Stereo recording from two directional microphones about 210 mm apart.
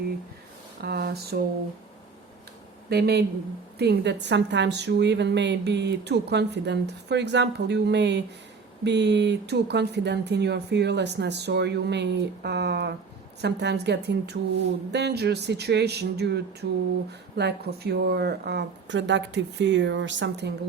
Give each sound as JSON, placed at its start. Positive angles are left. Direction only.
{"t": 0.8, "sound": "speech", "side_deg": -50}
{"t": 2.9, "sound": "a woman's voice", "side_deg": -50}